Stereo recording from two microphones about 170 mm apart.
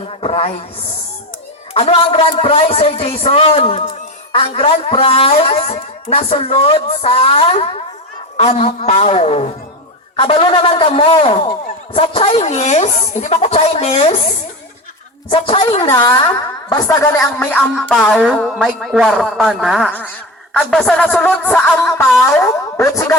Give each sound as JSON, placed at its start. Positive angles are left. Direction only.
{"t": 0.2, "sound": "a man's voice", "side_deg": 35}
{"t": 1.7, "sound": "a man's voice", "side_deg": 35}
{"t": 15.3, "sound": "a man's voice", "side_deg": 30}
{"t": 19.9, "sound": "speech", "side_deg": 10}